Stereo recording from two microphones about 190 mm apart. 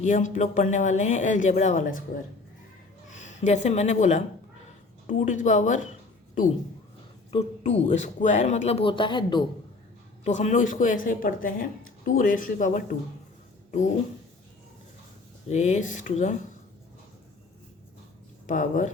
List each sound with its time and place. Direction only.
0.0 s speech: 40° left (ahead or behind)
3.1 s speech: 40° left (ahead or behind)
7.3 s speech: 35° left (ahead or behind)
10.2 s speech: 40° left (ahead or behind)
15.4 s speech: 40° left (ahead or behind)
18.4 s speech: 40° left (ahead or behind)